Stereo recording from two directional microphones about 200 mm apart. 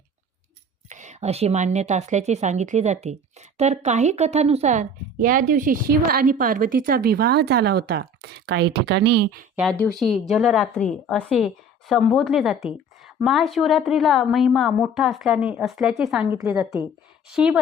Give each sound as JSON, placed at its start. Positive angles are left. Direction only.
{"t": 0.9, "sound": "a woman's voice", "side_deg": -35}
{"t": 9.6, "sound": "a woman's voice", "side_deg": 5}